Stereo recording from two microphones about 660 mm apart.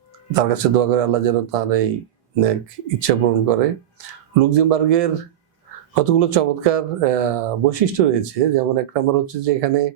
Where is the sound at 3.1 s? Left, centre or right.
Right.